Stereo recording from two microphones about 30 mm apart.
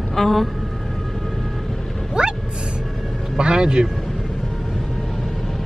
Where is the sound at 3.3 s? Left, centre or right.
Right.